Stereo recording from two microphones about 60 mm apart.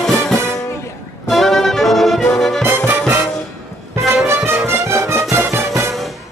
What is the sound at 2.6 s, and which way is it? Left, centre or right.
Music, right.